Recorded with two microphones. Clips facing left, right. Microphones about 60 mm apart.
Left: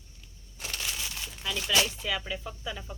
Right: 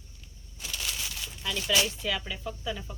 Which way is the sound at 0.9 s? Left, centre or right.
Left.